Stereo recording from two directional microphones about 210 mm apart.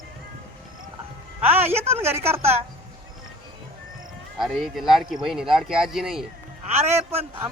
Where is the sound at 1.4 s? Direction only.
10° right (ahead or behind).